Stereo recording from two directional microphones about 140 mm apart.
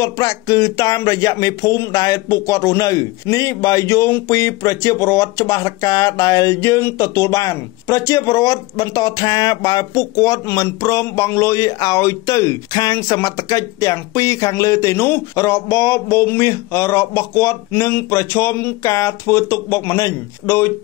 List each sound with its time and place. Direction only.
0.0 s speech: 25° left (ahead or behind)